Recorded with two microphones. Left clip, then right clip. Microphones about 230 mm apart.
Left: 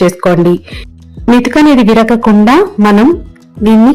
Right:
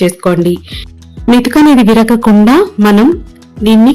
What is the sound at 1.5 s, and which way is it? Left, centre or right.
Speech, right.